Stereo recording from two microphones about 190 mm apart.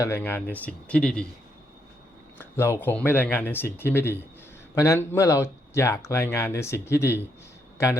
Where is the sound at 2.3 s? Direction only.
15° left (ahead or behind).